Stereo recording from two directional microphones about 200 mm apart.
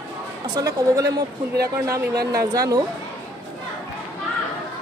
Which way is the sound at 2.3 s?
15° right (ahead or behind).